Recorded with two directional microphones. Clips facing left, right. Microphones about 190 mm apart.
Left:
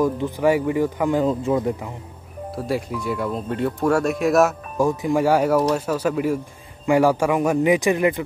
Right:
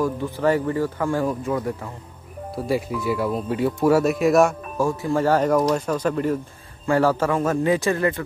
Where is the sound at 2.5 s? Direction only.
Centre (ahead or behind).